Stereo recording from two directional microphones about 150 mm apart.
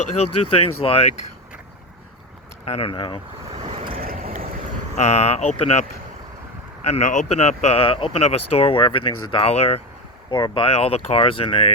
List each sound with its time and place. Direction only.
0.5 s speech: 40° left (ahead or behind)
2.6 s speech: 40° left (ahead or behind)
3.7 s vehicle: 40° right (ahead or behind)
3.9 s boat: 70° right (ahead or behind)
4.9 s speech: 50° left (ahead or behind)
6.8 s speech: 50° left (ahead or behind)